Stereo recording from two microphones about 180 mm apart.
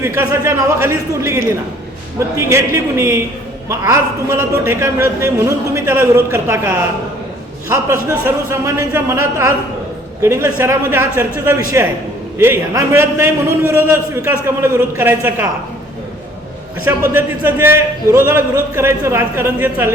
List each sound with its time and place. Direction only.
0.0 s a man's voice: 15° right (ahead or behind)
8.2 s a man's voice: 15° right (ahead or behind)
16.8 s a man's voice: 10° right (ahead or behind)